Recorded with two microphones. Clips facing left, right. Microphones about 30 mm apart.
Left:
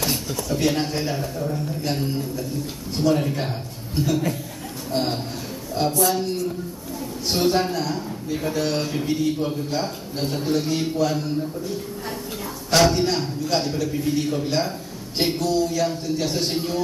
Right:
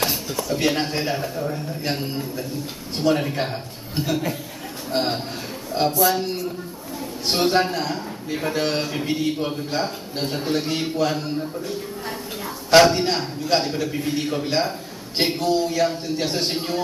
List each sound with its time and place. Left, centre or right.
0.1 s a sound: centre
0.6 s a man's voice: right
12.7 s a man's voice: right